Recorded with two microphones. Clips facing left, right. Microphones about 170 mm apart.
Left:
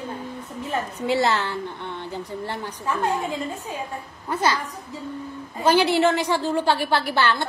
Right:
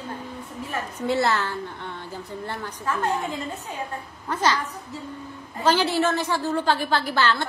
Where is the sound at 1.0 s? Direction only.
15° left (ahead or behind).